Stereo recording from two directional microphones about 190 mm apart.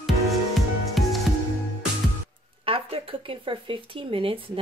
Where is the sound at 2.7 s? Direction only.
30° right (ahead or behind).